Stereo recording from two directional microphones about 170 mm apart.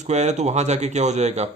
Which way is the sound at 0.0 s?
45° right (ahead or behind).